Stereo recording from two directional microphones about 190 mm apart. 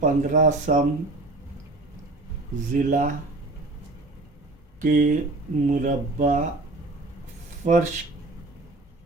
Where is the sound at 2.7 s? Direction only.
45° right (ahead or behind).